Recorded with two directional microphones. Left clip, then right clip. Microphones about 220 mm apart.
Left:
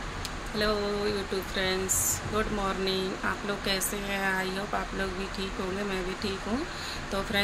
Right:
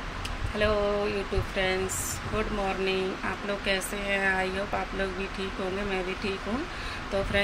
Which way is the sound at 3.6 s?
10° left (ahead or behind).